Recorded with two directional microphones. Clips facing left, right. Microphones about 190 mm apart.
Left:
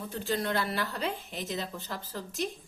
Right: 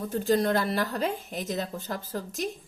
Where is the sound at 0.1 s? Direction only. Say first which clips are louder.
Right 7 dB; 40° right (ahead or behind).